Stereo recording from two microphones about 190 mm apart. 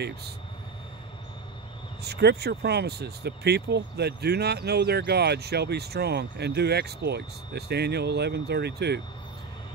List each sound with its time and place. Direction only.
2.0 s speech: 60° right (ahead or behind)